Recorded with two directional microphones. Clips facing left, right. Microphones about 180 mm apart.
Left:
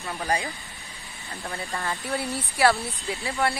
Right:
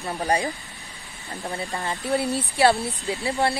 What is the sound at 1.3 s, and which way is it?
Speech, 20° right (ahead or behind).